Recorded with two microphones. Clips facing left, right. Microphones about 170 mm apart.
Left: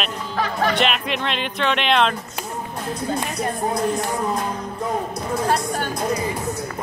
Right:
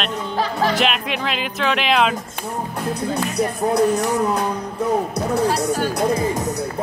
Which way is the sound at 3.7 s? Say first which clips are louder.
Right 5 dB; 70° right (ahead or behind).